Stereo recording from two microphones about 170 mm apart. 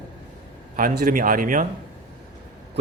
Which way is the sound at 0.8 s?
55° right (ahead or behind).